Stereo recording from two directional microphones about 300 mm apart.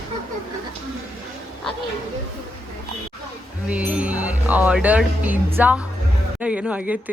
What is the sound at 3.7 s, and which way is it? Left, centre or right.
Speech, centre.